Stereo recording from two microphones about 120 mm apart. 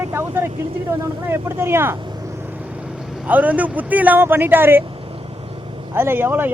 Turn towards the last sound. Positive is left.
turn(degrees=-15)  # may be behind; listen again after turning